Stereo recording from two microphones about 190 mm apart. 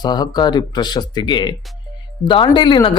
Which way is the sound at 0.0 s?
20° left (ahead or behind).